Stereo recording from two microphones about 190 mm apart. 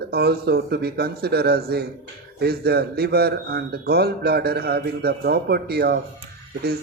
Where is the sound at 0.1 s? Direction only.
60° right (ahead or behind).